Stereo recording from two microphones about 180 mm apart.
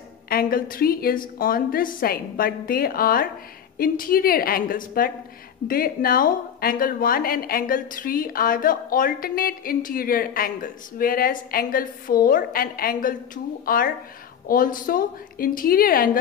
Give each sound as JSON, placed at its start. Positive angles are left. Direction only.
{"t": 0.3, "sound": "a woman's voice", "side_deg": 55}